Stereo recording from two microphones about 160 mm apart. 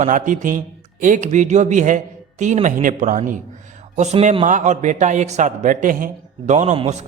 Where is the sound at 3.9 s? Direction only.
45° right (ahead or behind).